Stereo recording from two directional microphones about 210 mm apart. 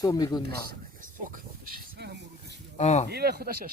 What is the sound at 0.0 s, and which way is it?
Speech, 15° left (ahead or behind).